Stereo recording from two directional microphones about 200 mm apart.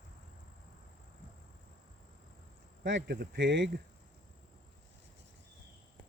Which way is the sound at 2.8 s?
60° right (ahead or behind).